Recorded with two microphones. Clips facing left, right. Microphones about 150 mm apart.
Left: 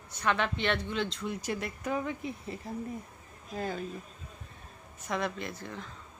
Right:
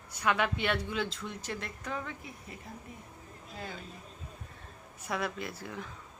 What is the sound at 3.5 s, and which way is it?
Speech, 45° left (ahead or behind).